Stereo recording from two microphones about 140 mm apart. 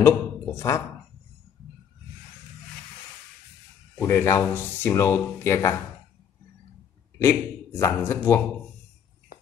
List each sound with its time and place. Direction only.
0.0 s a woman's voice: 20° left (ahead or behind)
4.0 s speech: 15° left (ahead or behind)
7.2 s a man's voice: 20° left (ahead or behind)